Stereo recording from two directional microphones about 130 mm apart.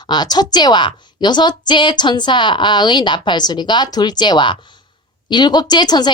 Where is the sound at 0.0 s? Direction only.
35° left (ahead or behind).